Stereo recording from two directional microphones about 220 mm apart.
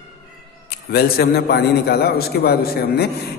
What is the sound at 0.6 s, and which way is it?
A man's voice, 45° left (ahead or behind).